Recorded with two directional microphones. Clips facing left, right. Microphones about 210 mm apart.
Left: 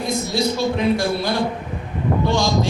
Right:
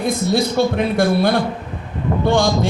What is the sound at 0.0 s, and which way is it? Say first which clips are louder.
A man's voice: right 3 dB; 55° right (ahead or behind).